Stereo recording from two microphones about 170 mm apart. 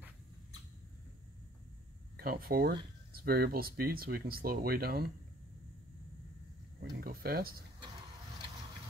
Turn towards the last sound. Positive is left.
turn(degrees=-60)  # may be behind; listen again after turning